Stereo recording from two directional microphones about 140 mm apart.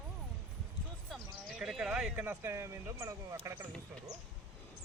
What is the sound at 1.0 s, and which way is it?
Speech, centre (ahead or behind).